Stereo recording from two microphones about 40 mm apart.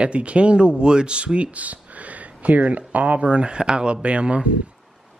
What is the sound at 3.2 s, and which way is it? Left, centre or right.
Speech, right.